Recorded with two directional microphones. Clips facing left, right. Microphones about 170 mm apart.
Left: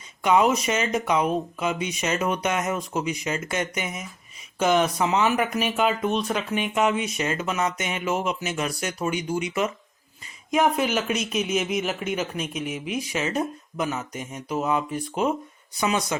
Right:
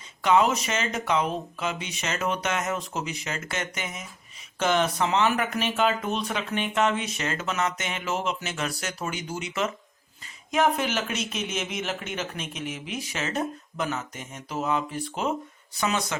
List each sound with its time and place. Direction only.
0.2 s speech: 10° left (ahead or behind)
10.5 s speech: 10° left (ahead or behind)